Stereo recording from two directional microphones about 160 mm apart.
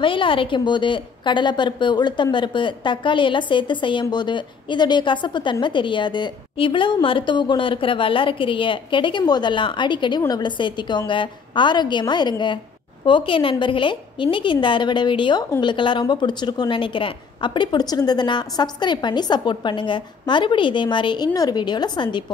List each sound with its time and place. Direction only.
0.0 s a woman's voice: 30° left (ahead or behind)